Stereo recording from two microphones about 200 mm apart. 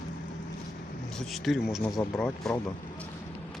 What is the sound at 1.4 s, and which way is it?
Speech, centre (ahead or behind).